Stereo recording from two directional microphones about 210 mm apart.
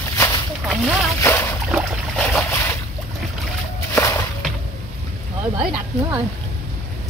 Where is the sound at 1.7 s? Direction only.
Centre (ahead or behind).